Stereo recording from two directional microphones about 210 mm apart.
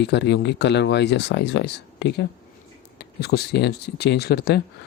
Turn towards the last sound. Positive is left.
turn(degrees=50)  # may be behind; listen again after turning